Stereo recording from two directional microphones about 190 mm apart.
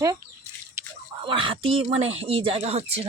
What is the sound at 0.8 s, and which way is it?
Drip, 15° right (ahead or behind).